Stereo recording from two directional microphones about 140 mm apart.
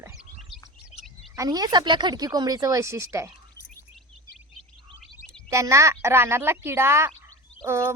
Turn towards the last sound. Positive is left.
turn(degrees=-20)  # may be behind; listen again after turning